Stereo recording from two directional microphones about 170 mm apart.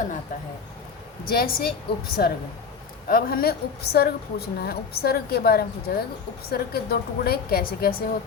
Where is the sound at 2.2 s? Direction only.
65° left (ahead or behind).